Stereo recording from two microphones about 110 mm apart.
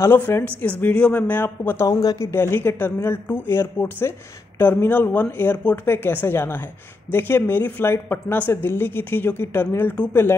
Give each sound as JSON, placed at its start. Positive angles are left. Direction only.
{"t": 0.0, "sound": "speech", "side_deg": 20}